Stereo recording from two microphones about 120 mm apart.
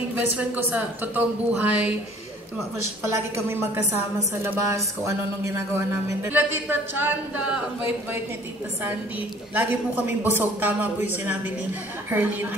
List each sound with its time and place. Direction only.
0.1 s speech: 15° right (ahead or behind)
3.1 s a woman's voice: 20° right (ahead or behind)
9.5 s speech: 15° right (ahead or behind)